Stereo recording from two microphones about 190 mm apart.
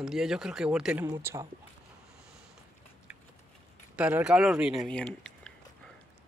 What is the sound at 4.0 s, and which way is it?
Speech, 5° right (ahead or behind).